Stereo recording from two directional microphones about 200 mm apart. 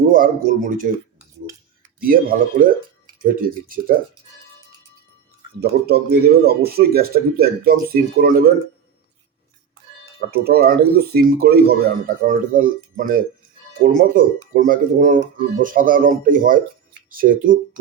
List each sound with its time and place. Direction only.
0.1 s speech: 45° right (ahead or behind)
2.0 s speech: 45° right (ahead or behind)
5.5 s speech: 50° right (ahead or behind)
10.2 s speech: 50° right (ahead or behind)